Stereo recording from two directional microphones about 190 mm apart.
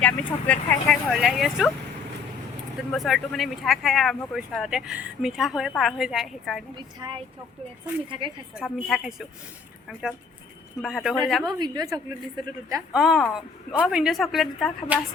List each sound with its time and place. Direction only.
0.0 s speech: 5° left (ahead or behind)
2.9 s speech: centre (ahead or behind)
6.7 s a woman's voice: 25° right (ahead or behind)
8.2 s a woman's voice: 25° right (ahead or behind)
8.5 s speech: centre (ahead or behind)
10.8 s speech: centre (ahead or behind)
11.4 s a woman's voice: 20° right (ahead or behind)
12.9 s speech: centre (ahead or behind)